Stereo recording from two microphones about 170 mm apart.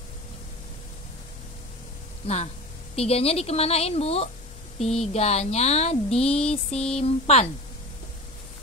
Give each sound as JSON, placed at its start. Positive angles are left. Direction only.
{"t": 2.2, "sound": "a woman's voice", "side_deg": 40}
{"t": 4.8, "sound": "speech", "side_deg": 5}
{"t": 5.1, "sound": "a woman's voice", "side_deg": 40}
{"t": 6.0, "sound": "speech", "side_deg": 5}
{"t": 7.0, "sound": "a woman's voice", "side_deg": 40}